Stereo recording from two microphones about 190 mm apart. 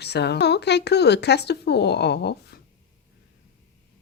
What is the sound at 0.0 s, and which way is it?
Speech, 60° left (ahead or behind).